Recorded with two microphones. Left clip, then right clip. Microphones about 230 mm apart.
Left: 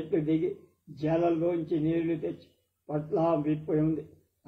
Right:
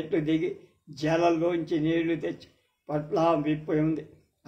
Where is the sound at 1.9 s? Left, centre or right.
Right.